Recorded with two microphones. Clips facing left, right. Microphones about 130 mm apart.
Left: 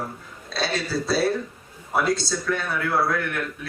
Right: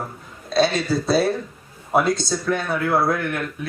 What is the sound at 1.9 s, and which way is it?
Speech, 20° right (ahead or behind).